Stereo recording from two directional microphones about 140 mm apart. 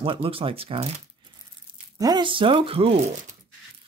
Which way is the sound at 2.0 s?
30° right (ahead or behind).